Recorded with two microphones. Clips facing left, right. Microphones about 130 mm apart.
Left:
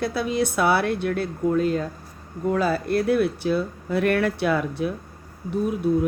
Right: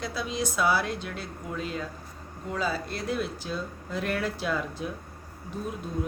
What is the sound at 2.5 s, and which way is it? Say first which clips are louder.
Speech: left 9 dB; 55° left (ahead or behind).